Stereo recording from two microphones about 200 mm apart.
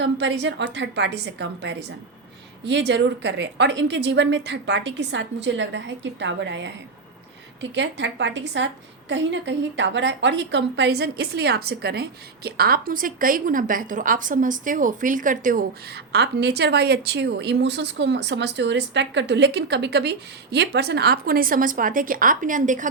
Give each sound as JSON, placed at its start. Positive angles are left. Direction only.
{"t": 0.0, "sound": "a woman's voice", "side_deg": -60}
{"t": 16.1, "sound": "a woman's voice", "side_deg": -55}